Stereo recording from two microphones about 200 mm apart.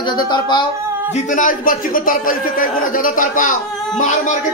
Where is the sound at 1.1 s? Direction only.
40° left (ahead or behind).